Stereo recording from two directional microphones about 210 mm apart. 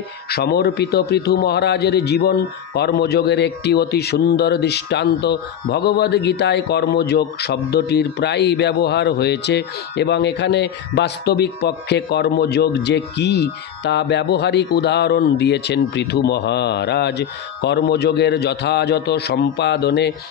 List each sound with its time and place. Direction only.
0.3 s a man's voice: 50° left (ahead or behind)